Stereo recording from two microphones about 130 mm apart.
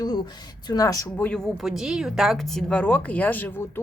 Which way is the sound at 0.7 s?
25° left (ahead or behind).